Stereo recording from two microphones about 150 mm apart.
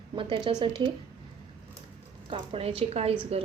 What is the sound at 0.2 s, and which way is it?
Speech, 35° right (ahead or behind).